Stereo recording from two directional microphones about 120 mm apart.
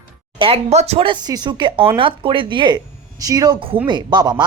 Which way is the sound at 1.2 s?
35° right (ahead or behind).